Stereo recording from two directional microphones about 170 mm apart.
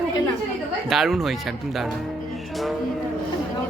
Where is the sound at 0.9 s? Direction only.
Centre (ahead or behind).